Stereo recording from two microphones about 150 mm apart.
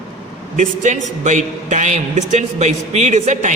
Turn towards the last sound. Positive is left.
turn(degrees=-50)  # may be behind; listen again after turning